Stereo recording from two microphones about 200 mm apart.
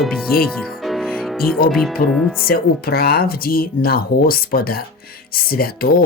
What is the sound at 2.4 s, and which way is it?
Speech, 50° left (ahead or behind).